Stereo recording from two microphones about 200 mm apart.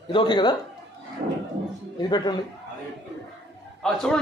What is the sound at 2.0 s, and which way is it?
Speech, 20° left (ahead or behind).